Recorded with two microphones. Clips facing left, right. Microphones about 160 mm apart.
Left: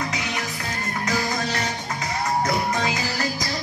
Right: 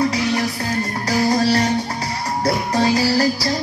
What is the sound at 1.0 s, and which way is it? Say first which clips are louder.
Music: right 9 dB; 35° right (ahead or behind).